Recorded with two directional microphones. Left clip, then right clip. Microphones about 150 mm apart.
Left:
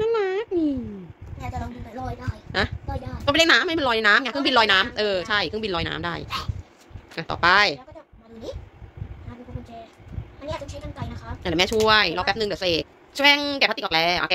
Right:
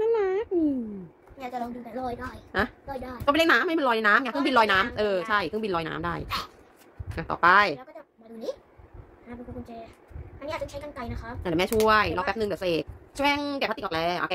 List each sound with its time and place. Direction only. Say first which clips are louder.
0.0 s a sound: left 2 dB; centre (ahead or behind)
2.5 s a woman's voice: left 3 dB; centre (ahead or behind)
10.4 s a woman's voice: even; 15° right (ahead or behind)
11.4 s a woman's voice: left 3 dB; 5° left (ahead or behind)